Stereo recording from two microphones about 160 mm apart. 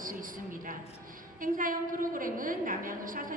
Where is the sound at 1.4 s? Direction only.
60° right (ahead or behind).